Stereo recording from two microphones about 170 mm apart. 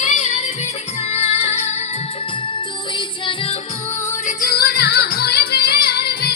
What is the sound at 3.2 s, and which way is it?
Music, 35° left (ahead or behind).